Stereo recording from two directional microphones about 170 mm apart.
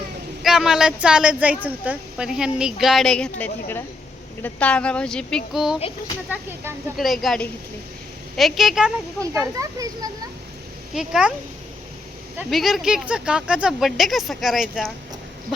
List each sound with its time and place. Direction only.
0.4 s a woman's voice: 5° right (ahead or behind)
6.9 s a woman's voice: centre (ahead or behind)
9.2 s speech: 20° right (ahead or behind)
10.9 s a woman's voice: 5° right (ahead or behind)
12.5 s a woman's voice: centre (ahead or behind)